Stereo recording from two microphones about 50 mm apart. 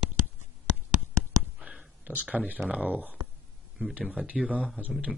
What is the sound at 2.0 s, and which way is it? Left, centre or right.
Speech, right.